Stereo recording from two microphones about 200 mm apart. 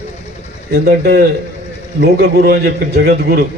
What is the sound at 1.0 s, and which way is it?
A man's voice, 55° right (ahead or behind).